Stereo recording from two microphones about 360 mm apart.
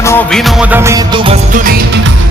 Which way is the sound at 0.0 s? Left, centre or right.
Centre.